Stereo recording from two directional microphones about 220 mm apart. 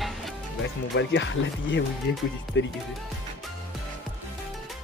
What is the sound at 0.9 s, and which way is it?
Speech, 55° left (ahead or behind).